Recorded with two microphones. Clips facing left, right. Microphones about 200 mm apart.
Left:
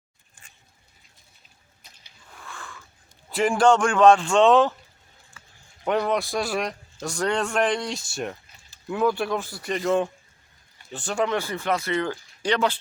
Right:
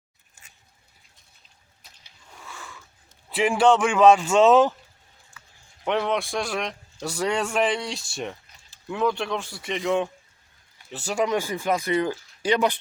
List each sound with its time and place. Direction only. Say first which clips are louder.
2.3 s cat: left 1 dB; 10° right (ahead or behind)
3.2 s a man's voice: even; 5° right (ahead or behind)
5.8 s a man's voice: left 1 dB; centre (ahead or behind)